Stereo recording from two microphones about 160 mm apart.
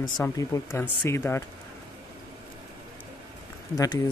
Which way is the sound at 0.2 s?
15° left (ahead or behind).